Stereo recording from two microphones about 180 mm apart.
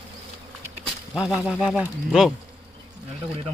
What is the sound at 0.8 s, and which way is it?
Speech, centre (ahead or behind).